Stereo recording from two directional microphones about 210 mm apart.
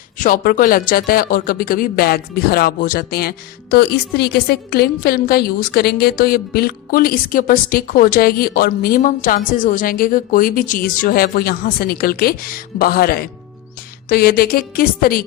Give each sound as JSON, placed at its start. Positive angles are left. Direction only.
{"t": 0.2, "sound": "speech", "side_deg": 40}